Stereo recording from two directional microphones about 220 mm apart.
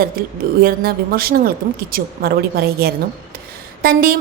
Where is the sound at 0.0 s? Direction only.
40° right (ahead or behind).